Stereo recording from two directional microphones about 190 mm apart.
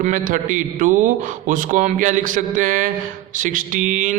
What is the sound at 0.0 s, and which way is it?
A man's voice, 40° right (ahead or behind).